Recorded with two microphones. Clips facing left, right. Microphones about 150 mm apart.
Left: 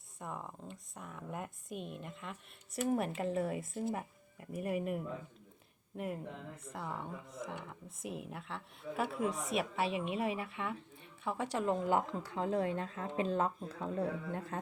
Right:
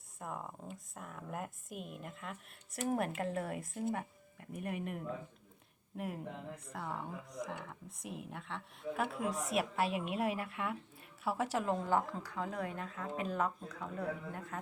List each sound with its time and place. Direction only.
0.2 s speech: centre (ahead or behind)
6.7 s speech: centre (ahead or behind)
11.9 s speech: 20° left (ahead or behind)